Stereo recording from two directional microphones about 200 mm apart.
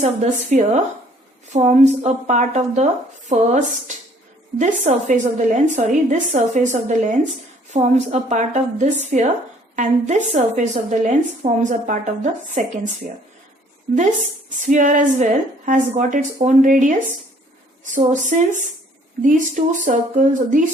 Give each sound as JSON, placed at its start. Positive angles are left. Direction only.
{"t": 0.0, "sound": "a woman's voice", "side_deg": -35}
{"t": 14.7, "sound": "a woman's voice", "side_deg": -40}